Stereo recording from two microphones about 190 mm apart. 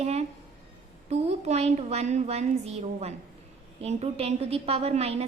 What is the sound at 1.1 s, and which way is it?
A woman's voice, 35° right (ahead or behind).